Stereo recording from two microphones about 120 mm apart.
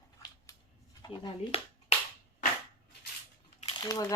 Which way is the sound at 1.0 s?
40° left (ahead or behind).